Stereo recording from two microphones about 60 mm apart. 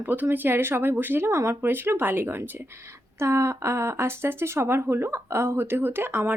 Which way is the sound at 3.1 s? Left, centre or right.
Right.